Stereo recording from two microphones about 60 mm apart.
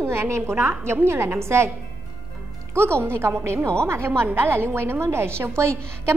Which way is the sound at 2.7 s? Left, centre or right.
Right.